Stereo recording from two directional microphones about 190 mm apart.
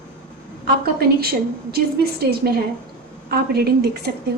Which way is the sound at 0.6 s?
55° right (ahead or behind).